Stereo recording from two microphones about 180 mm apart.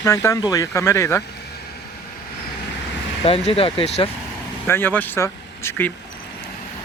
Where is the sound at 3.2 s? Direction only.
30° left (ahead or behind).